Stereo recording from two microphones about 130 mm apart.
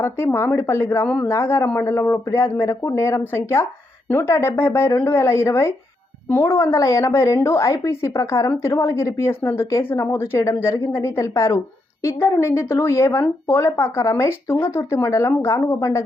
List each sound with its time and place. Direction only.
0.0 s speech: 20° left (ahead or behind)
1.0 s a man's voice: 10° left (ahead or behind)
1.3 s speech: 20° left (ahead or behind)